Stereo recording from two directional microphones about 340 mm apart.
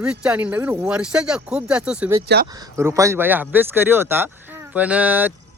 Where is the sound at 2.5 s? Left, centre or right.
Centre.